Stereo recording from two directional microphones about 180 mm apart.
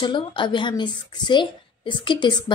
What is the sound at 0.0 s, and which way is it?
Speech, 25° left (ahead or behind).